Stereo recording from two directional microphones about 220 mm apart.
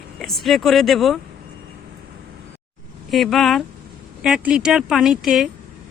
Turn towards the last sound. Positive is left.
turn(degrees=0)  # may be behind; listen again after turning